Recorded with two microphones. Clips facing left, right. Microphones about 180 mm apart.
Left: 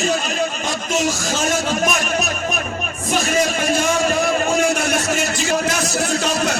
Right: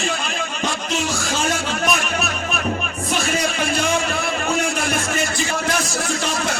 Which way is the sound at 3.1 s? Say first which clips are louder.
Left 4 dB; 45° left (ahead or behind).